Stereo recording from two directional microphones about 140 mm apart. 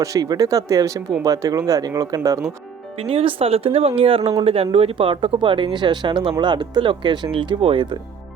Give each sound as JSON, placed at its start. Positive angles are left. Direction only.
{"t": 0.0, "sound": "speech", "side_deg": -25}
{"t": 3.0, "sound": "speech", "side_deg": -45}